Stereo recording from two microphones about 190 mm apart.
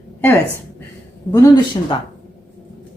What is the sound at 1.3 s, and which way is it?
Speech, 20° left (ahead or behind).